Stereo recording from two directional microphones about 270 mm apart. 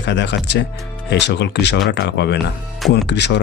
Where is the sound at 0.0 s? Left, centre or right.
Left.